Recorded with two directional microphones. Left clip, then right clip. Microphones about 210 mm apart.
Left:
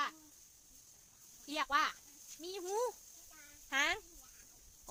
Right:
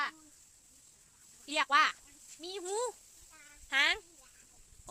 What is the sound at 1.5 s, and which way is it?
Speech, 20° right (ahead or behind).